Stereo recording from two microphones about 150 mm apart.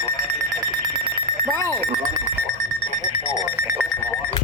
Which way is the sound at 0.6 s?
30° right (ahead or behind).